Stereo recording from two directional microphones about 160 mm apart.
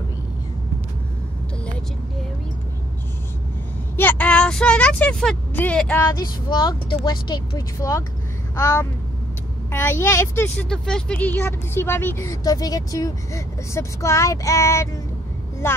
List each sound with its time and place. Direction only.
3.9 s speech: 10° left (ahead or behind)
6.1 s speech: 25° left (ahead or behind)
10.7 s speech: 5° left (ahead or behind)